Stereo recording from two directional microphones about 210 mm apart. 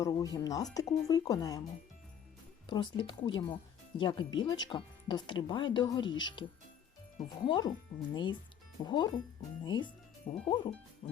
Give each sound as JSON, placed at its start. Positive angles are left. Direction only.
{"t": 0.0, "sound": "speech", "side_deg": 20}
{"t": 2.6, "sound": "speech", "side_deg": 20}
{"t": 11.0, "sound": "music", "side_deg": 25}